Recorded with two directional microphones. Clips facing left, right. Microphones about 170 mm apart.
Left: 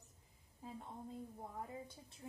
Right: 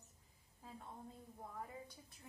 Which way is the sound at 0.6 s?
20° left (ahead or behind).